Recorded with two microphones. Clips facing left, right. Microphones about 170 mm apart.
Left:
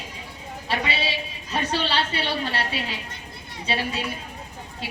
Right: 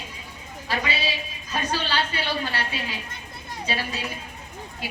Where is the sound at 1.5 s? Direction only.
30° left (ahead or behind).